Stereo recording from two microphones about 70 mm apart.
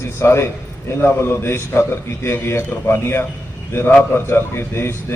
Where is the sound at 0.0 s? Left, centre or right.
Left.